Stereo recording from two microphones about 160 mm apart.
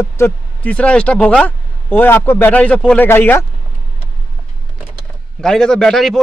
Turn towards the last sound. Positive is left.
turn(degrees=5)  # may be behind; listen again after turning